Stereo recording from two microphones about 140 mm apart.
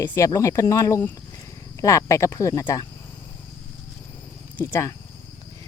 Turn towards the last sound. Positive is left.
turn(degrees=20)  # may be behind; listen again after turning